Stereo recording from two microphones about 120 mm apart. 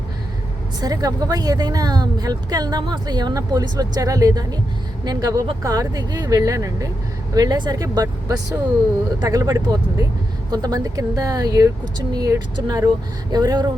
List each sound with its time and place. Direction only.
0.8 s speech: 30° right (ahead or behind)